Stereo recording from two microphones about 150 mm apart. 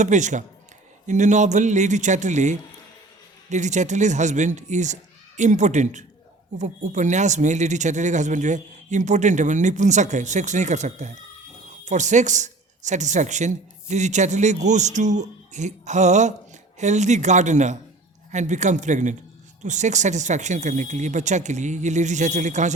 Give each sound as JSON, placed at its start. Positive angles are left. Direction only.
{"t": 0.0, "sound": "speech", "side_deg": -55}